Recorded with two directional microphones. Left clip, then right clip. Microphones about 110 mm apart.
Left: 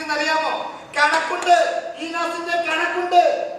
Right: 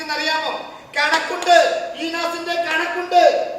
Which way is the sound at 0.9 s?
45° left (ahead or behind).